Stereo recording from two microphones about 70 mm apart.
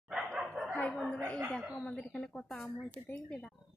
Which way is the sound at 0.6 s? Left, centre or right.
Centre.